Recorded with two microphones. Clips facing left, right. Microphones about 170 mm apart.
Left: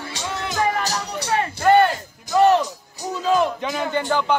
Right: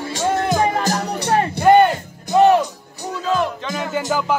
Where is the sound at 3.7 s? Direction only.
Centre (ahead or behind).